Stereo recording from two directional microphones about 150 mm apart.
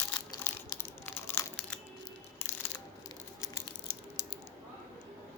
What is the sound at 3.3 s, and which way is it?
Crumpling, 20° left (ahead or behind).